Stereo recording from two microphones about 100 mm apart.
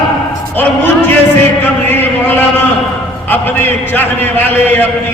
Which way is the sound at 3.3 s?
20° left (ahead or behind).